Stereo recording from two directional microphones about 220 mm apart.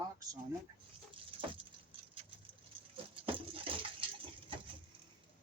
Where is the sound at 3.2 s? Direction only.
25° right (ahead or behind).